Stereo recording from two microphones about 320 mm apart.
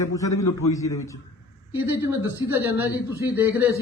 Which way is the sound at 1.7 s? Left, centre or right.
Centre.